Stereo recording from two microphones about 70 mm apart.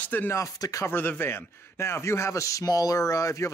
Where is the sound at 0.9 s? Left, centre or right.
Left.